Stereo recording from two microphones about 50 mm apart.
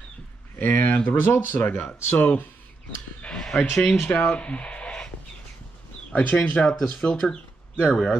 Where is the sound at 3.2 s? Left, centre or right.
Left.